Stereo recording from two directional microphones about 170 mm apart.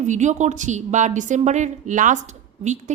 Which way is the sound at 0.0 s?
45° right (ahead or behind).